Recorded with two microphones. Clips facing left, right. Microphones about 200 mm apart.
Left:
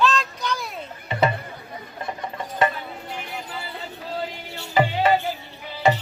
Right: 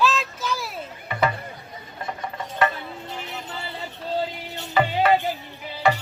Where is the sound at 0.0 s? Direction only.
5° right (ahead or behind).